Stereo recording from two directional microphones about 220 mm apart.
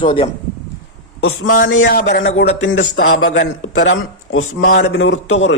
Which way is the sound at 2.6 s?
60° left (ahead or behind).